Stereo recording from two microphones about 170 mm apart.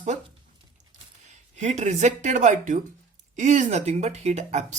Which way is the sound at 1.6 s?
40° right (ahead or behind).